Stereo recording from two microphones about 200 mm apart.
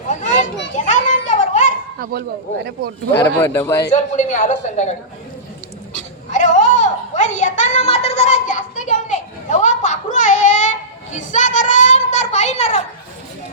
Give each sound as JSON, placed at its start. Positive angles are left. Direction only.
{"t": 0.1, "sound": "children playing", "side_deg": 35}
{"t": 3.1, "sound": "speech", "side_deg": 15}
{"t": 3.9, "sound": "speech", "side_deg": 35}
{"t": 6.3, "sound": "a sound", "side_deg": 35}